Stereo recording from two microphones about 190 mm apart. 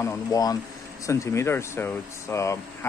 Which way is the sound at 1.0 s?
15° left (ahead or behind).